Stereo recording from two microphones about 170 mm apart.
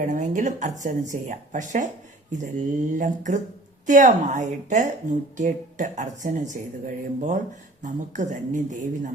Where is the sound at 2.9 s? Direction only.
50° right (ahead or behind).